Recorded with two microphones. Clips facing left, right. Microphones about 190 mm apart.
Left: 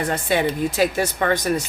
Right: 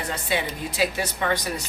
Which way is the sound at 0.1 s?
50° left (ahead or behind).